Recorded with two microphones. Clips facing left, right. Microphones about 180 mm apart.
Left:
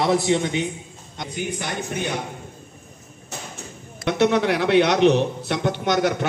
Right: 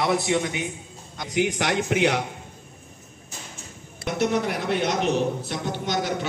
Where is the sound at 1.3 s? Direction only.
85° right.